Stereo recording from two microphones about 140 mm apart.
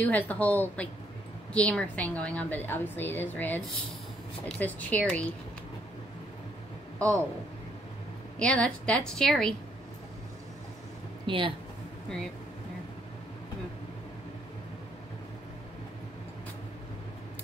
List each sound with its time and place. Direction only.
0.0 s a woman's voice: 10° left (ahead or behind)
7.0 s a man's voice: 20° right (ahead or behind)
8.4 s speech: 5° left (ahead or behind)
11.2 s speech: 35° right (ahead or behind)